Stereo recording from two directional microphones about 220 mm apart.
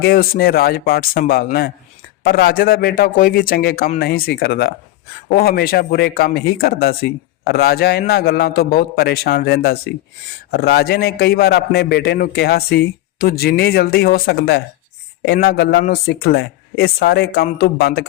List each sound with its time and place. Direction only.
0.0 s speech: 45° left (ahead or behind)